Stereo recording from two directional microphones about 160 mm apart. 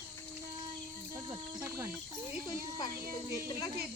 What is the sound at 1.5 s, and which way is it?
Speech, 15° right (ahead or behind).